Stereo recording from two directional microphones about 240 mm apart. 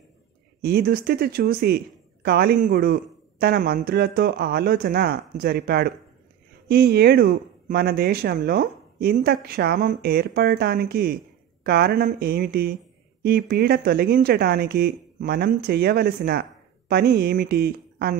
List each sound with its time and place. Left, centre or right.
0.6 s speech: right